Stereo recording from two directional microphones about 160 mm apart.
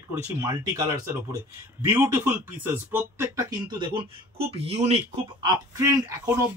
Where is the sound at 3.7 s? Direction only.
30° right (ahead or behind).